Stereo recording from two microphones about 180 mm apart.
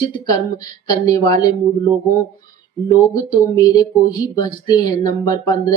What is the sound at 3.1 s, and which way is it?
Speech, 20° left (ahead or behind).